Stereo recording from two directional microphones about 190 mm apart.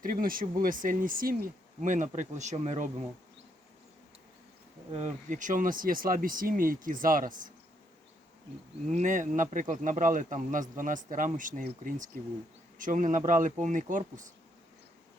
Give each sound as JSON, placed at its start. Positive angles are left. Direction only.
{"t": 0.0, "sound": "speech", "side_deg": -50}
{"t": 4.9, "sound": "speech", "side_deg": -35}
{"t": 8.9, "sound": "speech", "side_deg": -40}
{"t": 12.8, "sound": "speech", "side_deg": -45}